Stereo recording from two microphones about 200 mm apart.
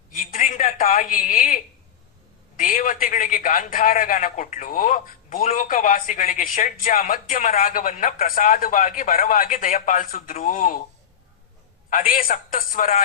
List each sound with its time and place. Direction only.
0.1 s a sound: 40° left (ahead or behind)
2.6 s a man's voice: 45° left (ahead or behind)
11.9 s a man's voice: 40° left (ahead or behind)